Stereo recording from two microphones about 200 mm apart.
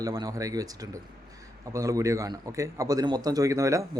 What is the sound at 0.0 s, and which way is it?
A man's voice, 20° right (ahead or behind).